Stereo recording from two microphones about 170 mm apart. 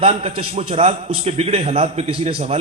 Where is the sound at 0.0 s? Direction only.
40° right (ahead or behind).